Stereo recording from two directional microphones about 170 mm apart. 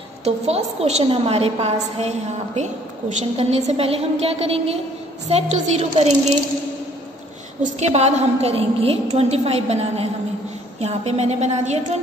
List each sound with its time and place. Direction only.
0.2 s a woman's voice: 35° right (ahead or behind)
7.6 s a woman's voice: 40° right (ahead or behind)